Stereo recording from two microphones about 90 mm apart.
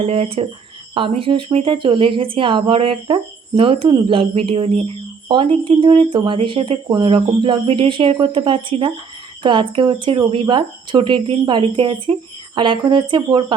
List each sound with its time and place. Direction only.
0.1 s speech: 90° right; by 8.9 s 70° right (ahead or behind)
9.4 s speech: 60° right (ahead or behind)